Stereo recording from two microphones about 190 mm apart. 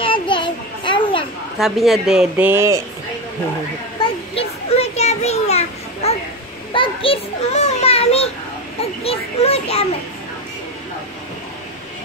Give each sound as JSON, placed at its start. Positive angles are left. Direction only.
{"t": 0.0, "sound": "children playing", "side_deg": 25}
{"t": 1.6, "sound": "speech", "side_deg": 0}
{"t": 4.0, "sound": "children playing", "side_deg": 30}